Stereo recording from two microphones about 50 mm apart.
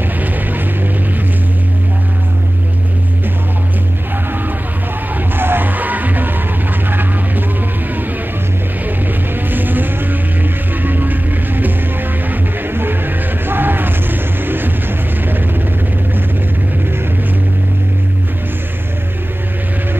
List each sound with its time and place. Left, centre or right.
5.1 s music: right
6.9 s vehicle: right
8.8 s music: right